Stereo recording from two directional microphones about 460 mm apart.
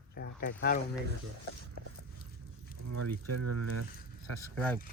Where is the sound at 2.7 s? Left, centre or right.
Right.